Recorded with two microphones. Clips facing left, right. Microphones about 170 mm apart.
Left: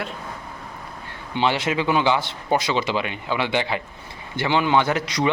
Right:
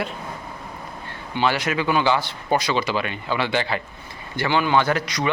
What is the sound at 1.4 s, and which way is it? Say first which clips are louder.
Speech: even; 25° left (ahead or behind).